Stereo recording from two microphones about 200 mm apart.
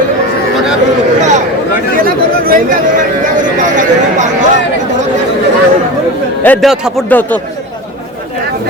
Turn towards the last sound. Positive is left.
turn(degrees=10)  # may be behind; listen again after turning